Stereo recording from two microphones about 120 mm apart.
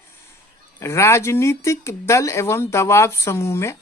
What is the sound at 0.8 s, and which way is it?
Speech, 25° left (ahead or behind).